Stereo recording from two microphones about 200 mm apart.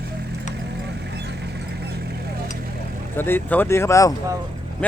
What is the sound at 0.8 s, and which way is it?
Vehicle, 55° right (ahead or behind).